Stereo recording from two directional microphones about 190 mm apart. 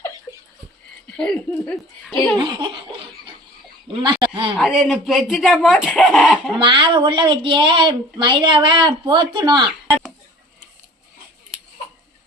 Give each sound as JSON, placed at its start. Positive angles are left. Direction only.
{"t": 1.1, "sound": "speech", "side_deg": 5}
{"t": 2.4, "sound": "a woman's voice", "side_deg": -25}
{"t": 4.5, "sound": "speech", "side_deg": 0}
{"t": 6.6, "sound": "a woman's voice", "side_deg": -25}